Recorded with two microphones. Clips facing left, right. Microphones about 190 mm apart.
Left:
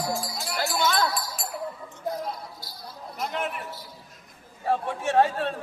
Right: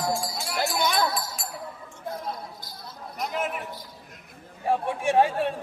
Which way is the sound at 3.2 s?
Centre (ahead or behind).